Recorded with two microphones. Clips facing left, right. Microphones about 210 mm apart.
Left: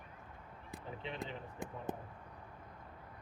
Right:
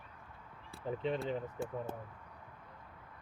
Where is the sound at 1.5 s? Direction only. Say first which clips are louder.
Right 3 dB; 15° left (ahead or behind).